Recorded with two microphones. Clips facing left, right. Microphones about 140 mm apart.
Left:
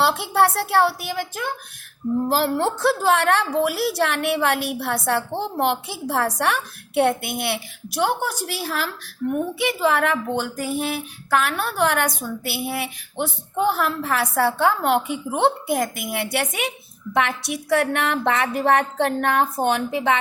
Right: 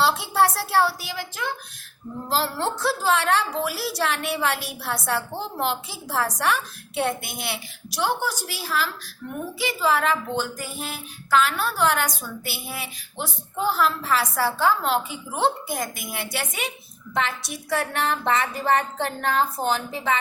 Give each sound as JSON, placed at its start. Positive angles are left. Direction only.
{"t": 0.0, "sound": "a woman's voice", "side_deg": 55}